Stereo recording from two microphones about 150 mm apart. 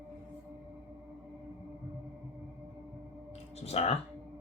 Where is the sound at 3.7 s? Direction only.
45° left (ahead or behind).